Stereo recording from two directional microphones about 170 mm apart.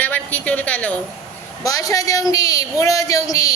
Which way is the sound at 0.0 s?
10° left (ahead or behind).